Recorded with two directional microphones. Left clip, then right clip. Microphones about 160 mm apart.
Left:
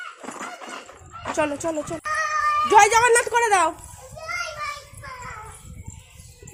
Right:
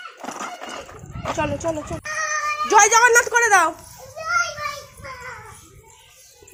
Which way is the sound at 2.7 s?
15° left (ahead or behind).